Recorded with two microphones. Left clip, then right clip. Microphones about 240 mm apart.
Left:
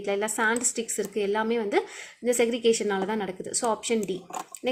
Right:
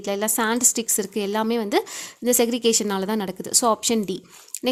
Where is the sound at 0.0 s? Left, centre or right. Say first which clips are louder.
Right 2 dB; right.